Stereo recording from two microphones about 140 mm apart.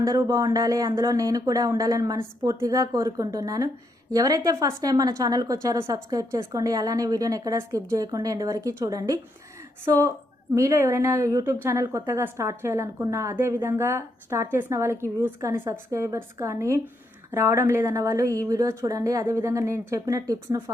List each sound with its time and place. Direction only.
0.0 s a woman's voice: 25° right (ahead or behind)
10.5 s a woman's voice: 20° right (ahead or behind)